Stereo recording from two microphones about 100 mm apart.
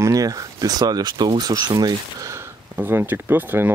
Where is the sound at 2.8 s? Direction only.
20° right (ahead or behind).